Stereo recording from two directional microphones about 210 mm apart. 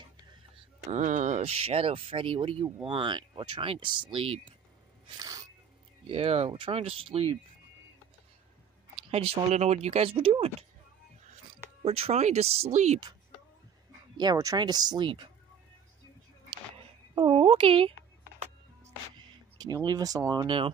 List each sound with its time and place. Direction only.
0.8 s speech: 35° right (ahead or behind)
5.0 s a sound: 15° right (ahead or behind)
6.0 s speech: 25° right (ahead or behind)
9.1 s speech: 30° right (ahead or behind)
11.8 s speech: 30° right (ahead or behind)
14.1 s speech: 20° right (ahead or behind)
17.1 s speech: 25° right (ahead or behind)
18.2 s music: 35° right (ahead or behind)
19.1 s speech: 20° right (ahead or behind)